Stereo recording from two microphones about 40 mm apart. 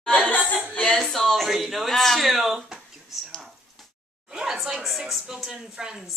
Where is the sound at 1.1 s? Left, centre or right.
Centre.